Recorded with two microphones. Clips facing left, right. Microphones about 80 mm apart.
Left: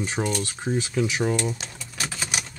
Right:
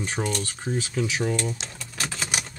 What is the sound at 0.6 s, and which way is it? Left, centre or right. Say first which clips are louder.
Speech: left 3 dB; left.